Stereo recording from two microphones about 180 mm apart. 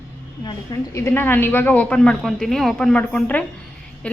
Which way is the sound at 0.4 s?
15° left (ahead or behind).